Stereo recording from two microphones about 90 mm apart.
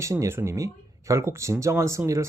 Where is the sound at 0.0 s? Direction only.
35° right (ahead or behind).